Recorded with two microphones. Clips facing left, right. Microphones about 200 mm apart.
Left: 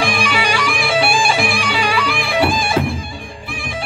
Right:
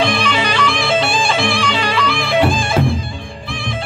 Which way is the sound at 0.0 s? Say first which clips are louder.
Right 2 dB; 10° left (ahead or behind).